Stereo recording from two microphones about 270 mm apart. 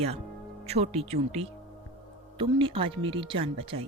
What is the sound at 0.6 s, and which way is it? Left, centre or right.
Speech, right.